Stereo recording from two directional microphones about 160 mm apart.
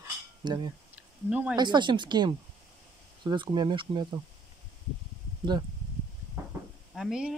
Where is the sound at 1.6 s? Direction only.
30° right (ahead or behind).